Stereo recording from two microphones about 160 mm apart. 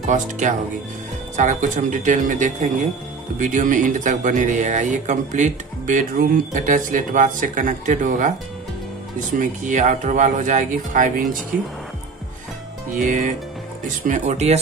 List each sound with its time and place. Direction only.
0.0 s speech: 50° right (ahead or behind)
9.4 s speech: 50° right (ahead or behind)
13.0 s speech: 55° right (ahead or behind)